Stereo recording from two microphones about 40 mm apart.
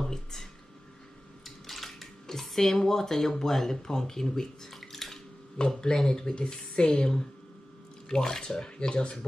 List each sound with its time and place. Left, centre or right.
0.0 s speech: centre
1.4 s a sound: centre
5.8 s speech: centre